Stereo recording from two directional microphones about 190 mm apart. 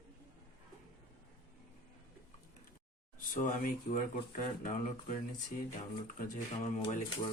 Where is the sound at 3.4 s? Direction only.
40° left (ahead or behind).